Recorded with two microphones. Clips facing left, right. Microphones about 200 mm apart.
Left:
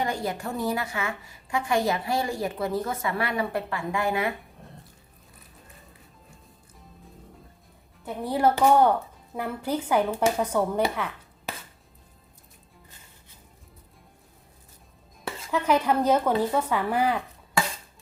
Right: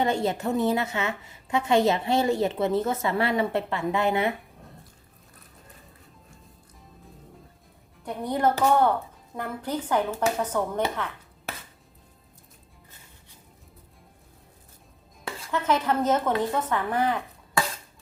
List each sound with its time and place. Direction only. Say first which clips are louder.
0.0 s a woman's voice: right 4 dB; 25° right (ahead or behind)
8.0 s speech: left 1 dB; 5° left (ahead or behind)
15.5 s speech: left 2 dB; 10° left (ahead or behind)